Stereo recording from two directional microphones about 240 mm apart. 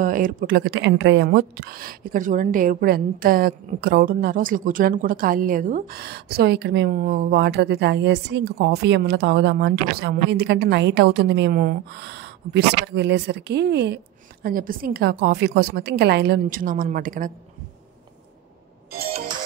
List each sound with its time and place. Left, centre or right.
0.0 s a woman's voice: right